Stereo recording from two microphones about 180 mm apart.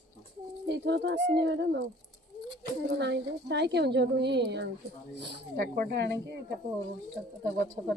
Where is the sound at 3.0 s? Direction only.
70° right (ahead or behind).